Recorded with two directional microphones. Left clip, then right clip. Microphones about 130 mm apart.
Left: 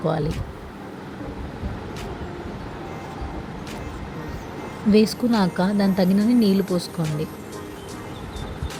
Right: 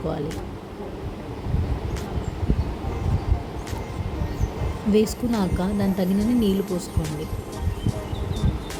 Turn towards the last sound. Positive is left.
turn(degrees=5)  # may be behind; listen again after turning